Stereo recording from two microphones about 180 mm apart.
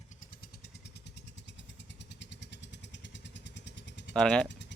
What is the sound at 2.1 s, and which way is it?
Vehicle, 75° left (ahead or behind).